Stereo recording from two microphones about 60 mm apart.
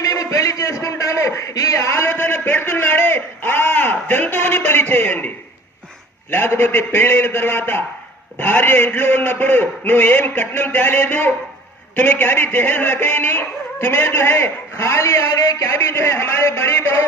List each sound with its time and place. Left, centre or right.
0.1 s a man's voice: left
6.3 s dog: left